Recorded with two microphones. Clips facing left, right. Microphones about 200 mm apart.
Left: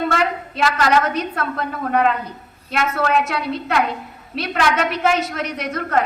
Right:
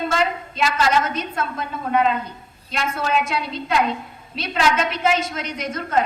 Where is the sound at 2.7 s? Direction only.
60° left (ahead or behind).